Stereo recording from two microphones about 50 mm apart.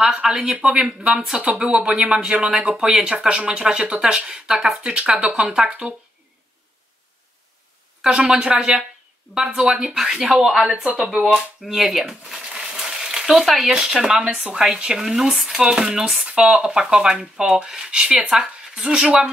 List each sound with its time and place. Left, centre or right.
0.0 s speech: centre
8.0 s a woman's voice: centre
11.6 s speech: centre
13.7 s speech: centre